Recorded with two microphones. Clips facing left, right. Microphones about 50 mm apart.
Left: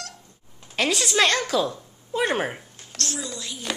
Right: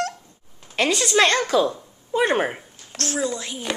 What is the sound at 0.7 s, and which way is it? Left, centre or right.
A woman's voice, centre.